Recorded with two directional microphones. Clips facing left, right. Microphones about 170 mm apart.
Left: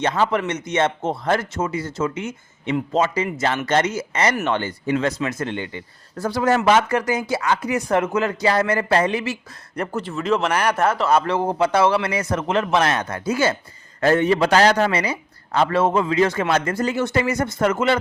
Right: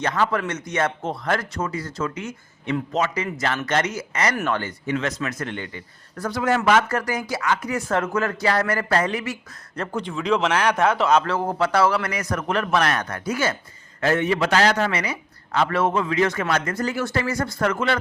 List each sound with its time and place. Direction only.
0.0 s a man's voice: 25° left (ahead or behind)
6.6 s a man's voice: 20° left (ahead or behind)
7.7 s a man's voice: 15° left (ahead or behind)
9.7 s a man's voice: 10° left (ahead or behind)
11.2 s a man's voice: 20° left (ahead or behind)